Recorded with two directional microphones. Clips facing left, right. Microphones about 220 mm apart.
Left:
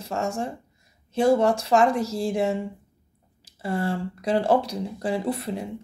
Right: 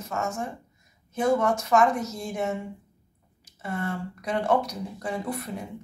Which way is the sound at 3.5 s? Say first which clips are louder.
Left 5 dB; 30° left (ahead or behind).